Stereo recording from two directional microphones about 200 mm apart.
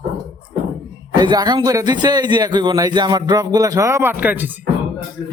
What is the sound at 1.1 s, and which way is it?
A man's voice, 20° right (ahead or behind).